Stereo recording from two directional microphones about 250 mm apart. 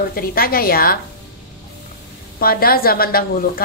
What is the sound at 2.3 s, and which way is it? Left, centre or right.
Speech, left.